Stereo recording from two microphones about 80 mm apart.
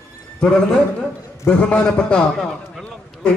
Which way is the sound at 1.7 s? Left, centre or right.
Centre.